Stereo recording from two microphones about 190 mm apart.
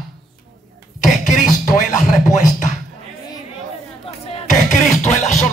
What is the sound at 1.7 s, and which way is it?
Speech, 40° left (ahead or behind).